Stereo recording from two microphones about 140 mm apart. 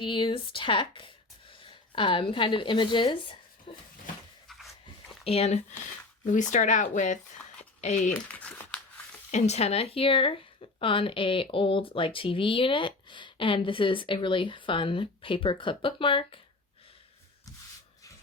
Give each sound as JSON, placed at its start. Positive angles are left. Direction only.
{"t": 0.0, "sound": "speech", "side_deg": 35}
{"t": 4.4, "sound": "dog", "side_deg": 0}
{"t": 5.2, "sound": "speech", "side_deg": 45}
{"t": 6.2, "sound": "speech", "side_deg": 65}
{"t": 8.1, "sound": "speech", "side_deg": 10}
{"t": 9.3, "sound": "speech", "side_deg": 50}